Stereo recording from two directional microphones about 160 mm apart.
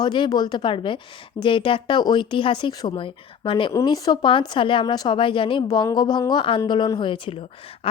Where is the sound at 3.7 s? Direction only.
20° left (ahead or behind).